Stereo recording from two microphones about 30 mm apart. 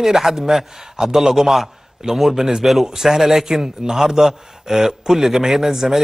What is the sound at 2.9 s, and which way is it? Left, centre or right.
Speech, centre.